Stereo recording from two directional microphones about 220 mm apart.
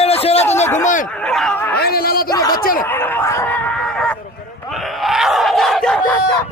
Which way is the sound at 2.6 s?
40° left (ahead or behind).